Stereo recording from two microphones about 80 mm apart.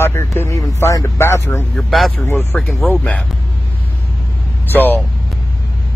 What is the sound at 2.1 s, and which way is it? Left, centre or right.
Speech, left.